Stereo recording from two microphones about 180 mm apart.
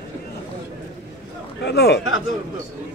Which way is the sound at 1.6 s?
65° left (ahead or behind).